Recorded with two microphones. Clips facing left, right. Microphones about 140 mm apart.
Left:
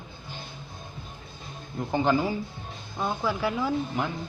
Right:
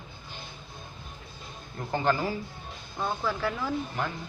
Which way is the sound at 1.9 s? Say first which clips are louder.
Left 3 dB; 15° left (ahead or behind).